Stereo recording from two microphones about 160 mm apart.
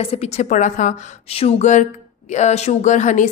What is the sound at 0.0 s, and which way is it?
A woman's voice, 40° left (ahead or behind).